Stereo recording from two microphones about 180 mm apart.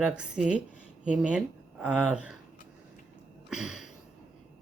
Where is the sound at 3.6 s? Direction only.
5° right (ahead or behind).